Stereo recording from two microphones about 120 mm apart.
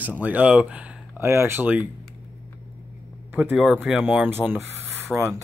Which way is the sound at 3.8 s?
10° right (ahead or behind).